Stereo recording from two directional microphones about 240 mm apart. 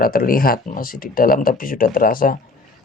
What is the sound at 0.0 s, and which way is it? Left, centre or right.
Speech, left.